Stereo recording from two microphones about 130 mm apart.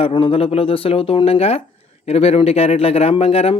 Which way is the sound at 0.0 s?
45° left (ahead or behind).